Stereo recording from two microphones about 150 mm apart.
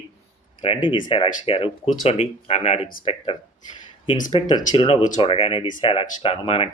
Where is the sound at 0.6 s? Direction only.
35° left (ahead or behind).